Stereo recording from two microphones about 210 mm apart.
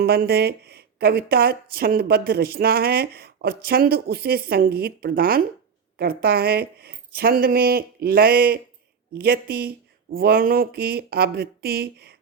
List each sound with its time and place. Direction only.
0.0 s a woman's voice: 50° right (ahead or behind)